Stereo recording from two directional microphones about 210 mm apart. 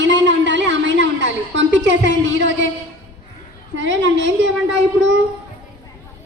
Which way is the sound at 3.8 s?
60° right (ahead or behind).